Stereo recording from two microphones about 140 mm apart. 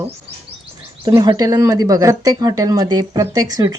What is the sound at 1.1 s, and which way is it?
Speech, 30° right (ahead or behind).